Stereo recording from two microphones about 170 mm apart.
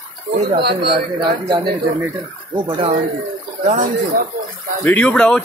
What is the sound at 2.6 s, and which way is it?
Speech, 30° right (ahead or behind).